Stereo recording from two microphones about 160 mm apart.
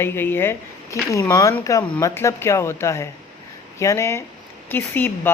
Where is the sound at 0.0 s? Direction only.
15° left (ahead or behind).